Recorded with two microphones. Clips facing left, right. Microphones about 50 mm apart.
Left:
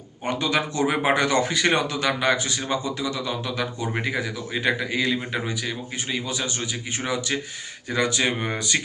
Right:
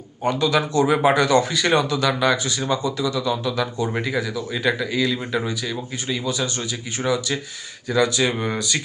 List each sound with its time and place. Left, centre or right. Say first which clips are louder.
0.3 s speech: right 4 dB; left